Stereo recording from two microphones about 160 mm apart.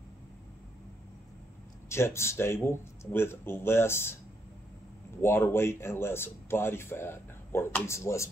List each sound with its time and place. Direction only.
1.9 s speech: 15° left (ahead or behind)
5.2 s speech: 15° left (ahead or behind)